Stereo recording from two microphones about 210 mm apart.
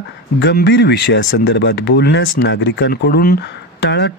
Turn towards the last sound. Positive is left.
turn(degrees=55)  # may be behind; listen again after turning